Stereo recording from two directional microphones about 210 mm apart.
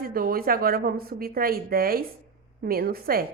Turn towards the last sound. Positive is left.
turn(degrees=-45)  # may be behind; listen again after turning